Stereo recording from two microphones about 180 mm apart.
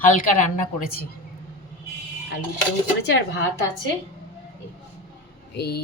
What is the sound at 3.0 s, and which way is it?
Speech, 75° left (ahead or behind).